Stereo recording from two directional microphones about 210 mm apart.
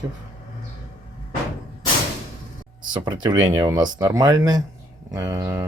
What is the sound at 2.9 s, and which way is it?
Speech, 20° right (ahead or behind).